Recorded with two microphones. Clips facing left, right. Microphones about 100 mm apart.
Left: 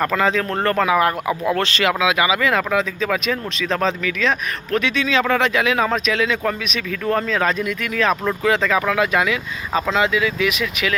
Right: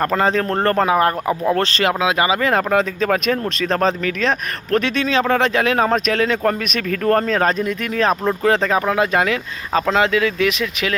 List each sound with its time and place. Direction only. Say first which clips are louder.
0.0 s speech: right 1 dB; 40° right (ahead or behind)